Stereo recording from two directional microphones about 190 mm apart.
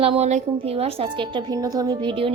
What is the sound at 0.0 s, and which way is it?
Speech, 35° right (ahead or behind).